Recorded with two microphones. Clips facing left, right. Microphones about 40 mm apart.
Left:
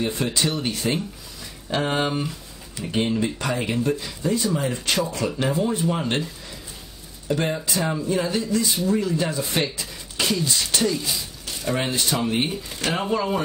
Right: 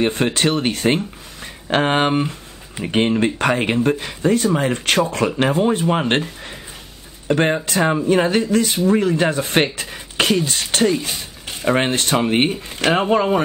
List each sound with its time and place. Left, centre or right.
0.0 s speech: right